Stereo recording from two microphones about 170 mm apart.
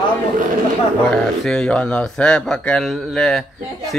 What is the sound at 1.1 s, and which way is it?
A man's voice, 5° left (ahead or behind).